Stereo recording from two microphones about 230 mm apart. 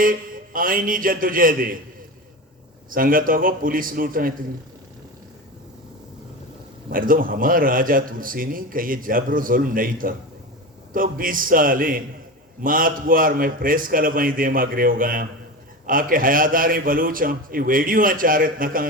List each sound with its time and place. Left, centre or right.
0.0 s a man's voice: right
2.9 s a man's voice: right
6.9 s a man's voice: right